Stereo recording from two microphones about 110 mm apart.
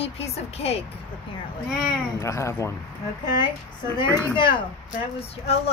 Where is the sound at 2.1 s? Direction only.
25° left (ahead or behind).